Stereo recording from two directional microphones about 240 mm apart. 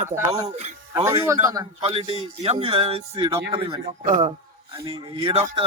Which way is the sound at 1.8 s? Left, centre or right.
Right.